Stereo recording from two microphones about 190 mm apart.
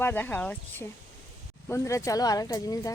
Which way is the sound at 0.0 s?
10° left (ahead or behind).